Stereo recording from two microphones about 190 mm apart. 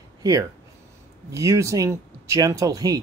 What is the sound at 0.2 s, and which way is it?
Speech, 15° right (ahead or behind).